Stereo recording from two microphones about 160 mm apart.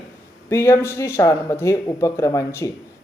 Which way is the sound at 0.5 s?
15° left (ahead or behind).